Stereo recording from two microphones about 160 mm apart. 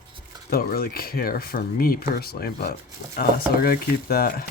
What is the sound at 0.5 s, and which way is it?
Speech, 70° left (ahead or behind).